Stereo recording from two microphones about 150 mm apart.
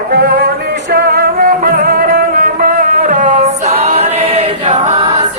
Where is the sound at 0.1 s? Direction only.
90° right.